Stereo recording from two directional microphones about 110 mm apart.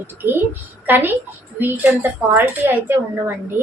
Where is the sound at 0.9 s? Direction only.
15° right (ahead or behind).